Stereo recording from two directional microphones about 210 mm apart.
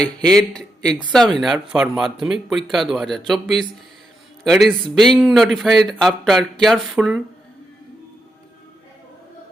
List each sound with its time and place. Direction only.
0.0 s speech: 5° left (ahead or behind)